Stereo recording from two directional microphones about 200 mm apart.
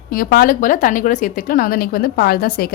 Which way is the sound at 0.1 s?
45° left (ahead or behind).